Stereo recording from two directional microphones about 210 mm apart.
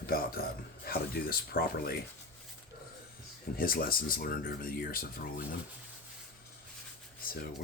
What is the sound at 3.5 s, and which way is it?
Speech, 45° left (ahead or behind).